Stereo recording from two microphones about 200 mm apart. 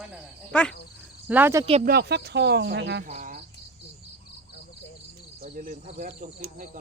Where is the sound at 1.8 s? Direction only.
55° right (ahead or behind).